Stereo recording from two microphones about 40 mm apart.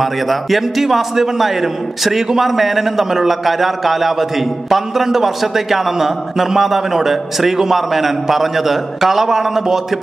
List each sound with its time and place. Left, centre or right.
0.0 s a man's voice: centre